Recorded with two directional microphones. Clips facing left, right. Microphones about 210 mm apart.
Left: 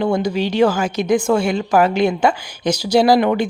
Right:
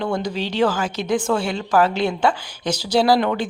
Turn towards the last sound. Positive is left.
turn(degrees=15)  # may be behind; listen again after turning